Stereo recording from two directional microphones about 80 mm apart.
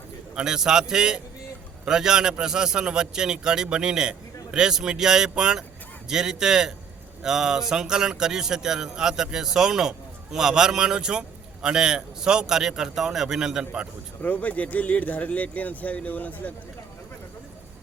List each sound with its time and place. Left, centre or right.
0.3 s a man's voice: centre
14.2 s speech: centre